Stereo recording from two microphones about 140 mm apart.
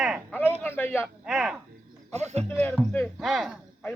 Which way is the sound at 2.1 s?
50° right (ahead or behind).